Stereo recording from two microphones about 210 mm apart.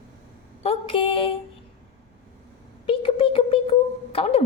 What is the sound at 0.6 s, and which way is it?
Speech, 25° left (ahead or behind).